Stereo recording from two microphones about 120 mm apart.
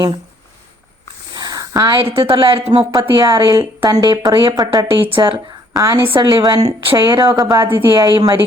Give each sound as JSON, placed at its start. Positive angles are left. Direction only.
{"t": 1.3, "sound": "a sound", "side_deg": -35}
{"t": 2.0, "sound": "speech", "side_deg": -50}
{"t": 2.9, "sound": "a woman's voice", "side_deg": -35}
{"t": 5.0, "sound": "speech", "side_deg": -45}
{"t": 5.7, "sound": "a woman's voice", "side_deg": -30}
{"t": 6.1, "sound": "a woman's voice", "side_deg": -40}